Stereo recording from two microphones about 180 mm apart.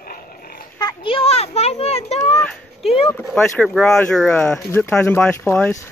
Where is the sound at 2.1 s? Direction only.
35° left (ahead or behind).